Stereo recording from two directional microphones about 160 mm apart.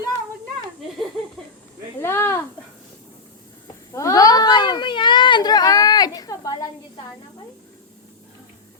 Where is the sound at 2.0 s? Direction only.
15° left (ahead or behind).